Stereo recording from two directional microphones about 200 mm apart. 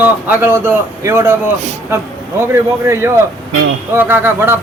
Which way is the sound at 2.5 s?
10° right (ahead or behind).